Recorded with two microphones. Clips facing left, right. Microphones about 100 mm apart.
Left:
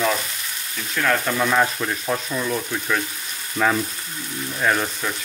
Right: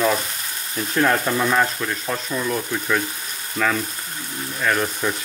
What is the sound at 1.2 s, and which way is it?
Speech, 5° right (ahead or behind).